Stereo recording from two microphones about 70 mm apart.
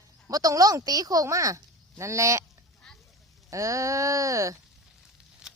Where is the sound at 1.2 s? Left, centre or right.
Right.